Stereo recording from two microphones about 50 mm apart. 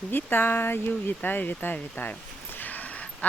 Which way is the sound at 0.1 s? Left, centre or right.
Left.